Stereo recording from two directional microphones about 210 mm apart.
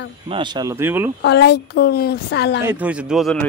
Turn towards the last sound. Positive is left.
turn(degrees=0)  # may be behind; listen again after turning